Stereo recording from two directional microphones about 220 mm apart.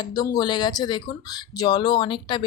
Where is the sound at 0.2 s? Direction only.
20° left (ahead or behind).